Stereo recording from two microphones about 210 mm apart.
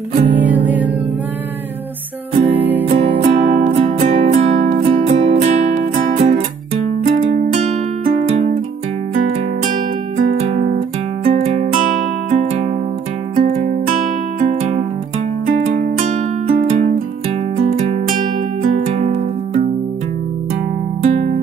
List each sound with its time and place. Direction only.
0.1 s music: 30° right (ahead or behind)
0.4 s music: 10° right (ahead or behind)
2.5 s music: 10° right (ahead or behind)
2.9 s music: 30° right (ahead or behind)
9.1 s music: 40° right (ahead or behind)
17.9 s music: 40° right (ahead or behind)